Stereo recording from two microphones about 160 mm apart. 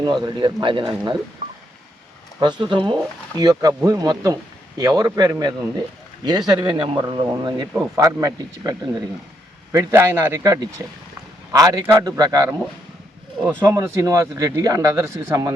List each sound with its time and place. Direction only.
0.0 s speech: 25° right (ahead or behind)
2.4 s speech: 30° right (ahead or behind)
9.7 s speech: 15° right (ahead or behind)